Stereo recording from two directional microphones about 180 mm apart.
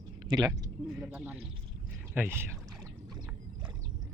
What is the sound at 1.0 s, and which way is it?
Speech, 5° right (ahead or behind).